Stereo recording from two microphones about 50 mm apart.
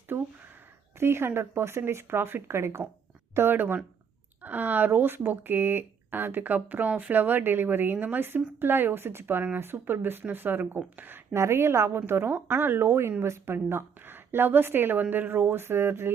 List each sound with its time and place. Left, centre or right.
0.1 s a sound: right
0.9 s speech: right
3.3 s speech: right
11.3 s a woman's voice: right
11.9 s speech: right
12.3 s speech: right